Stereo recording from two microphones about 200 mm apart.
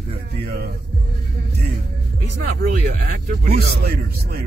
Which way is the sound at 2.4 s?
50° right (ahead or behind).